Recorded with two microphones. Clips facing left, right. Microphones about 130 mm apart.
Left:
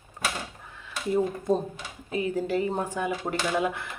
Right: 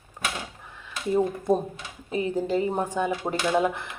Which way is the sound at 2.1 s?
20° right (ahead or behind).